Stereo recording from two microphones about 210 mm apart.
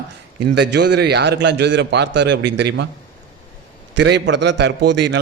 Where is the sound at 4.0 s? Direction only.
55° right (ahead or behind).